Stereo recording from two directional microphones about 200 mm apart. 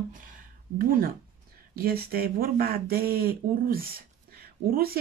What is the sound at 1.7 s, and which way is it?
Speech, 50° right (ahead or behind).